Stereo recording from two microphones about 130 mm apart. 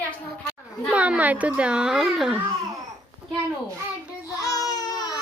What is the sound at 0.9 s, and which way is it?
A child's voice, 10° right (ahead or behind).